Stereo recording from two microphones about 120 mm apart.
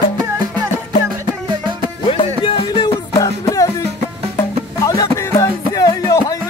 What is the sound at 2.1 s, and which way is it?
Music, 50° left (ahead or behind).